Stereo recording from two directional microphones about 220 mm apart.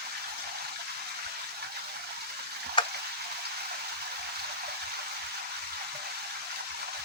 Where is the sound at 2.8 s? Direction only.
20° left (ahead or behind).